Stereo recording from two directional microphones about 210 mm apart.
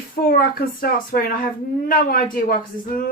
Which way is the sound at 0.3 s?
45° left (ahead or behind).